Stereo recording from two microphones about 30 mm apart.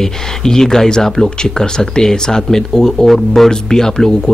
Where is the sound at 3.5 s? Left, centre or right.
Left.